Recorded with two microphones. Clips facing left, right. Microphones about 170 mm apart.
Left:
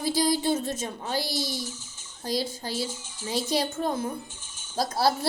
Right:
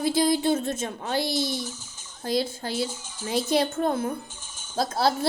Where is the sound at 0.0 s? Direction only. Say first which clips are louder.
Right 3 dB; 55° right (ahead or behind).